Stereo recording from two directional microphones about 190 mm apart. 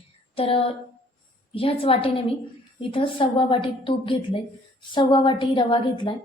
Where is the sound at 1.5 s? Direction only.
30° left (ahead or behind).